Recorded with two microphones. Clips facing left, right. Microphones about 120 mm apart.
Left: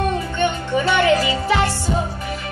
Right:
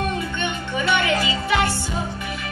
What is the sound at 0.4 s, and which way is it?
Music, 35° left (ahead or behind).